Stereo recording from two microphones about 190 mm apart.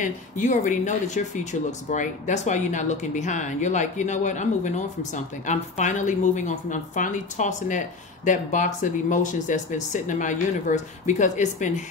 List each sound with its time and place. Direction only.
0.0 s speech: 40° left (ahead or behind)